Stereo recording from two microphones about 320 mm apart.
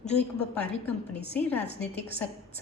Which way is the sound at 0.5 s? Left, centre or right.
Centre.